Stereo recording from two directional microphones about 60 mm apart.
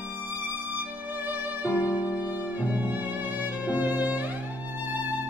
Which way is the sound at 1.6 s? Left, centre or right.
Left.